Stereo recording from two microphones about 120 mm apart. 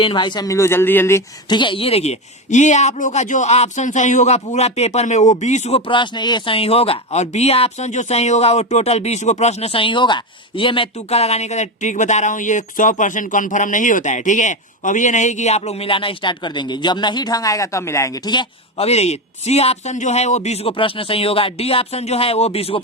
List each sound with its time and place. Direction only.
0.0 s speech: 40° left (ahead or behind); by 1.2 s 20° left (ahead or behind)
1.5 s speech: 40° left (ahead or behind); by 4.4 s 85° left
4.4 s speech: 65° left (ahead or behind)
5.8 s speech: 40° left (ahead or behind)
10.9 s speech: 60° left (ahead or behind); by 18.2 s 25° left (ahead or behind)
18.8 s speech: 65° left (ahead or behind)